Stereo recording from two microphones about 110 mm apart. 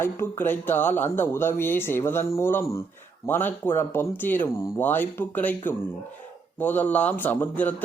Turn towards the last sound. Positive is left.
turn(degrees=15)  # may be behind; listen again after turning